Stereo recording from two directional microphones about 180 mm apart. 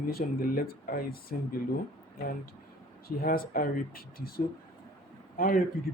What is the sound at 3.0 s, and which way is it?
A man's voice, 55° left (ahead or behind).